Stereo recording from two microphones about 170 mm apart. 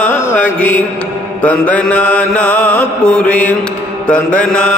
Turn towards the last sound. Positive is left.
turn(degrees=5)  # may be behind; listen again after turning